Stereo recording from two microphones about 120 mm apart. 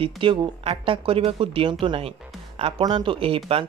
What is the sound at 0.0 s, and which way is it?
Speech, 45° right (ahead or behind).